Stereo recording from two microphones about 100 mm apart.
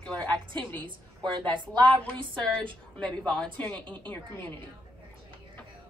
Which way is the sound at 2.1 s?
55° right (ahead or behind).